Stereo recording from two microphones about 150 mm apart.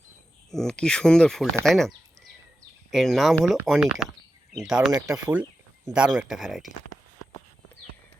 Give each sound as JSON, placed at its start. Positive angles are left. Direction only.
{"t": 0.5, "sound": "speech", "side_deg": 5}
{"t": 2.9, "sound": "speech", "side_deg": 0}
{"t": 4.9, "sound": "speech", "side_deg": -25}
{"t": 5.9, "sound": "speech", "side_deg": -5}